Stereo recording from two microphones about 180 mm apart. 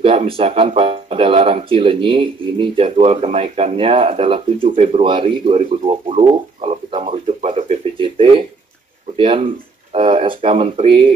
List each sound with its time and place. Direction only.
0.0 s speech: 30° right (ahead or behind)
8.0 s a sound: 30° right (ahead or behind)
9.1 s speech: 30° right (ahead or behind)